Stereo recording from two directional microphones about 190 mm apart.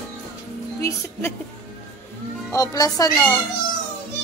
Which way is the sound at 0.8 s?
15° left (ahead or behind).